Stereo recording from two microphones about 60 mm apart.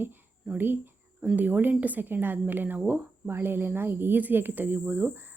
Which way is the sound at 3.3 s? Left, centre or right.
Right.